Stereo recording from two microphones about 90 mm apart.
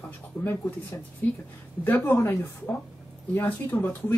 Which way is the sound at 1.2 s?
20° left (ahead or behind).